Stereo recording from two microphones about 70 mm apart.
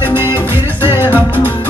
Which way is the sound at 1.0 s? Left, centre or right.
Left.